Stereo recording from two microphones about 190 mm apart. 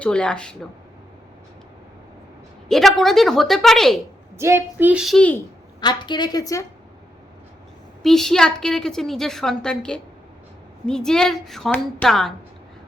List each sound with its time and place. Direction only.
0.0 s a woman's voice: 5° left (ahead or behind)
2.6 s a woman's voice: centre (ahead or behind)
4.4 s a woman's voice: 15° right (ahead or behind); by 5.4 s 5° left (ahead or behind)
5.8 s a woman's voice: 25° left (ahead or behind)
8.0 s a woman's voice: centre (ahead or behind)